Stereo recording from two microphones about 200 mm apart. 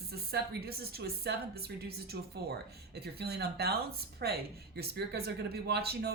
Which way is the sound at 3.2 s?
50° right (ahead or behind).